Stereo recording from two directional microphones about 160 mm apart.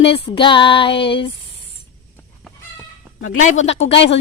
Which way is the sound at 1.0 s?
35° left (ahead or behind).